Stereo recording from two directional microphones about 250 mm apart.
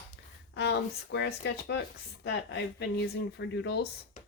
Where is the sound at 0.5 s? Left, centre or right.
Left.